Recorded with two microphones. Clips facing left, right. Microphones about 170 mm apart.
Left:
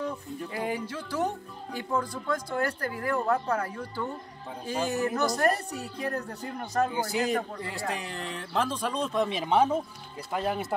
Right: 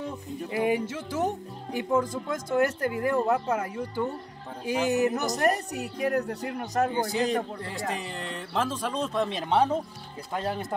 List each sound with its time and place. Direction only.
0.5 s speech: 20° right (ahead or behind)
6.9 s a man's voice: 5° left (ahead or behind)